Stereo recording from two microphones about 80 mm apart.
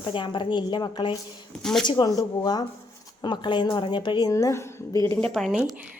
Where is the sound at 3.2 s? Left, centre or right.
Left.